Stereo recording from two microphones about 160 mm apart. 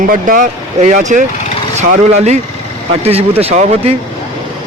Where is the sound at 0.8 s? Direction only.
50° right (ahead or behind).